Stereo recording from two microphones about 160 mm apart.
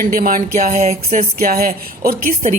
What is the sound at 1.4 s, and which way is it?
A man's voice, 65° right (ahead or behind).